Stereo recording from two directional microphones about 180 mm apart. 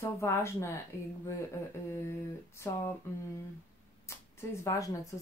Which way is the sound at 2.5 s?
15° left (ahead or behind).